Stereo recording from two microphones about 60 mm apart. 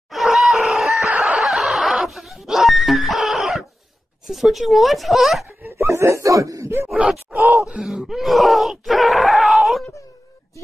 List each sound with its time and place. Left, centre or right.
0.1 s screaming: centre
1.1 s chicken: centre
1.4 s snicker: centre
2.0 s a sound: centre
4.3 s speech: centre
5.6 s speech: right
7.3 s groan: centre
8.2 s speech: centre